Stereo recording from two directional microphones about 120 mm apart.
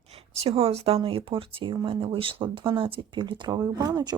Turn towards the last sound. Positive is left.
turn(degrees=-35)  # may be behind; listen again after turning